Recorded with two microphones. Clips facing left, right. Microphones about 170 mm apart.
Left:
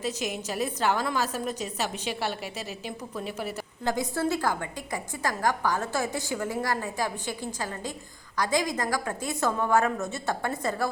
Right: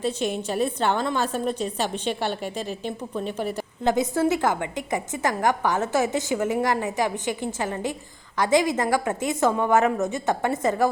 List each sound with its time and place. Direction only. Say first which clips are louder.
0.0 s a woman's voice: right 5 dB; 30° right (ahead or behind)
2.0 s a woman's voice: right 5 dB; 5° left (ahead or behind)
3.8 s a woman's voice: right 6 dB; 20° right (ahead or behind)